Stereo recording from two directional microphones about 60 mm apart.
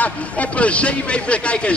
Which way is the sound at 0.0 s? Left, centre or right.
Left.